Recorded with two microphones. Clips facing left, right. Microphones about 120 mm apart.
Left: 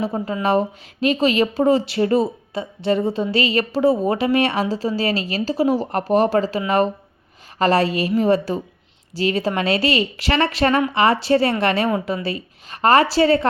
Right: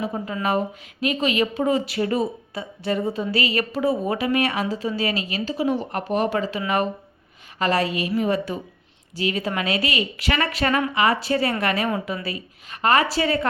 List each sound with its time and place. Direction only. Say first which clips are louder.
0.0 s a woman's voice: left 4 dB; 30° left (ahead or behind)